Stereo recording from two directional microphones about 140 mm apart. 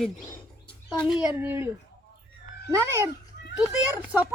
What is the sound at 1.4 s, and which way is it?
Speech, 15° right (ahead or behind).